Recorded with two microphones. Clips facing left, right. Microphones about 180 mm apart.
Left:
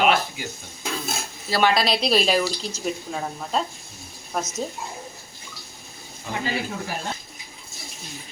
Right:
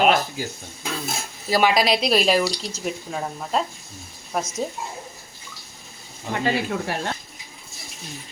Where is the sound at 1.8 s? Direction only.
30° left (ahead or behind).